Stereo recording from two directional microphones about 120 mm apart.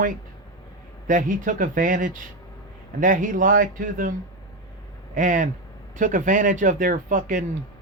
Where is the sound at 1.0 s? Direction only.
90° right.